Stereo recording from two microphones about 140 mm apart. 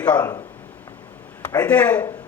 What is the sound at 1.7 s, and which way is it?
Speech, 10° left (ahead or behind).